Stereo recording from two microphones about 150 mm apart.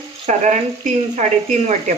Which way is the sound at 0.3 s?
50° right (ahead or behind).